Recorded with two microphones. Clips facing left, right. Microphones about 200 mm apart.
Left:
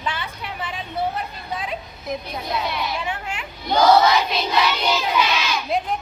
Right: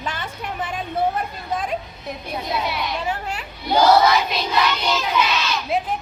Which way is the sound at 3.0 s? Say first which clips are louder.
Right 2 dB; 40° right (ahead or behind).